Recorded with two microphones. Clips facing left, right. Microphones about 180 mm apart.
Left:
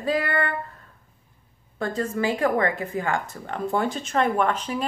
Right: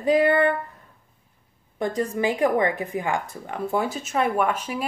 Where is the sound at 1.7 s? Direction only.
15° right (ahead or behind).